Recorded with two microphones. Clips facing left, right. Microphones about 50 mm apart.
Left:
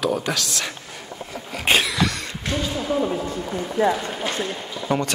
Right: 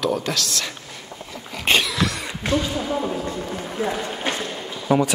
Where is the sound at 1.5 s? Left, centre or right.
Centre.